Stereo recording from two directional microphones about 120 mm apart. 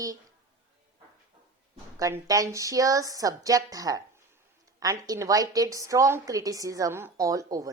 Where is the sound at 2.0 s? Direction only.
30° right (ahead or behind).